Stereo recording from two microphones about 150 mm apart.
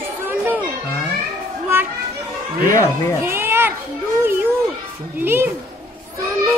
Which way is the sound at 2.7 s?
25° left (ahead or behind).